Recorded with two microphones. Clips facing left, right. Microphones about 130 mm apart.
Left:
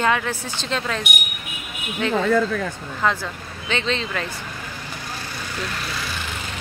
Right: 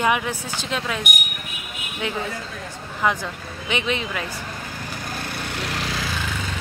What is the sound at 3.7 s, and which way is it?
Speech, 15° right (ahead or behind).